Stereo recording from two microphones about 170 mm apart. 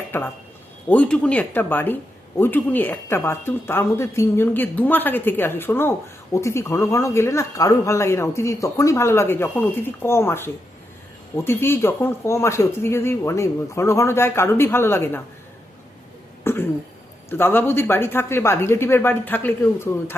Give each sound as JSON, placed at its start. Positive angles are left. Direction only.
{"t": 0.1, "sound": "speech", "side_deg": 15}
{"t": 16.4, "sound": "cough", "side_deg": 15}
{"t": 17.2, "sound": "speech", "side_deg": 15}